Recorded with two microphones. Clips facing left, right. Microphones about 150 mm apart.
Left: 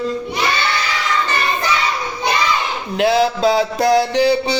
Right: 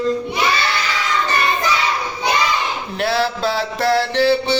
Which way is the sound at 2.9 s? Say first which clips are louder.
Left 5 dB; 15° left (ahead or behind).